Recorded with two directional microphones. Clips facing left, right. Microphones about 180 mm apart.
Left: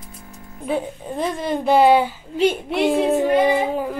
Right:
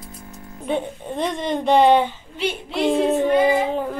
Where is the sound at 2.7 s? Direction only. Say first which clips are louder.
Left 3 dB; 60° left (ahead or behind).